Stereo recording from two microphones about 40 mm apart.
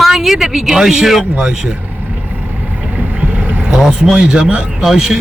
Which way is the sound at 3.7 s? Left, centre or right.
Centre.